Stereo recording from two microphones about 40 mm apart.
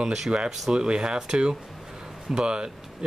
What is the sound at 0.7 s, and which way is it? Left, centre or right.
Speech, right.